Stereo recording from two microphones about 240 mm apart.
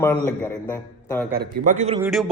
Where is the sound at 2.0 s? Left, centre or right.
Centre.